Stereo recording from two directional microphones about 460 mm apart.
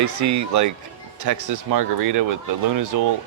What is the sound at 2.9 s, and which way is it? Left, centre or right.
Speech, right.